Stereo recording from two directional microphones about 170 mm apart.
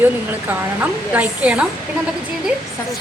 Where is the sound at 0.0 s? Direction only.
10° right (ahead or behind).